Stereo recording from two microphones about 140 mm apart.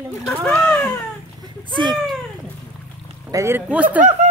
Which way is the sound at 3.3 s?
20° right (ahead or behind).